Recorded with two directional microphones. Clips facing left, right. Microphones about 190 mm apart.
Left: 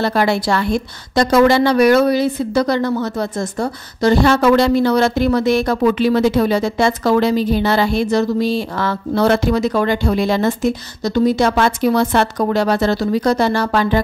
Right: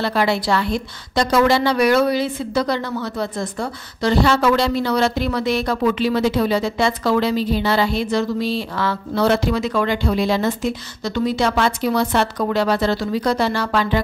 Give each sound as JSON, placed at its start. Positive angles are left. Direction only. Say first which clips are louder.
{"t": 0.0, "sound": "a woman's voice", "louder": "left 3 dB", "side_deg": 45}